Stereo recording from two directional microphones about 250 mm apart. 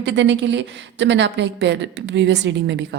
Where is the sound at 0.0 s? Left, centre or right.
Right.